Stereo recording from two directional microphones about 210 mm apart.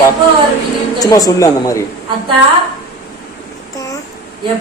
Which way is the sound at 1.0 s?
15° left (ahead or behind).